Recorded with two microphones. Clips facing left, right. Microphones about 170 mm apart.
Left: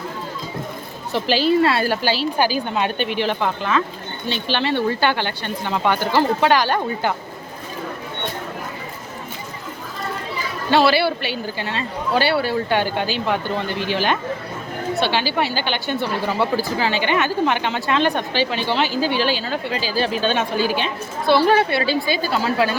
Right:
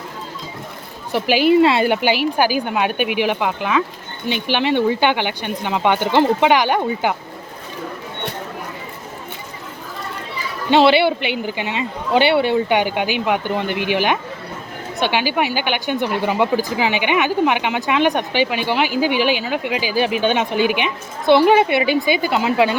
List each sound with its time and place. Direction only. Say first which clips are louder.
1.1 s a woman's voice: right 3 dB; 15° right (ahead or behind)
10.7 s a woman's voice: right 3 dB; 20° right (ahead or behind)